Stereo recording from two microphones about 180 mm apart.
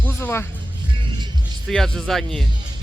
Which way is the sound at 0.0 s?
15° left (ahead or behind).